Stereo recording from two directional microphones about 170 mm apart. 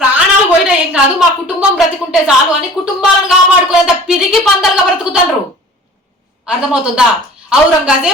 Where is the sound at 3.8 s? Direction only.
5° right (ahead or behind).